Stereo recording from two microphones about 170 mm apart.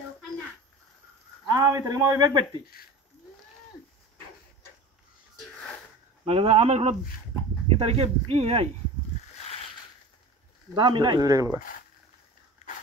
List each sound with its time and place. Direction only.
1.5 s a man's voice: 20° right (ahead or behind)
6.2 s speech: 35° right (ahead or behind)
10.7 s a man's voice: 25° right (ahead or behind)